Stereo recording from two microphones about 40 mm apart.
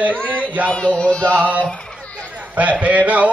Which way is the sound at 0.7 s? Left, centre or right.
Left.